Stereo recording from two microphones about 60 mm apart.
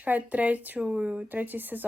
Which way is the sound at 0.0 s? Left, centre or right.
Right.